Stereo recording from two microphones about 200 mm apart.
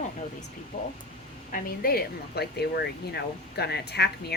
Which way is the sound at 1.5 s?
45° left (ahead or behind).